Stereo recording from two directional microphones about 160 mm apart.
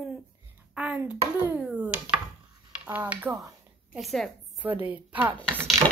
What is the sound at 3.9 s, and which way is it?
Speech, centre (ahead or behind).